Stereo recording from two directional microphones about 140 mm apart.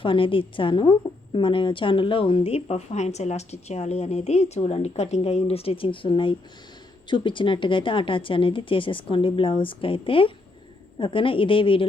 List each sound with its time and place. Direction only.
0.0 s a woman's voice: 40° left (ahead or behind)